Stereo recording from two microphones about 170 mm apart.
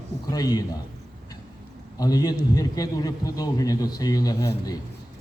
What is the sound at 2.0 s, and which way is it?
A man's voice, 20° left (ahead or behind).